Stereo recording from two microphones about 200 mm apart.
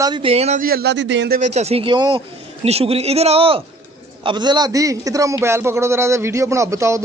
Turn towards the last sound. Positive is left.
turn(degrees=-15)  # may be behind; listen again after turning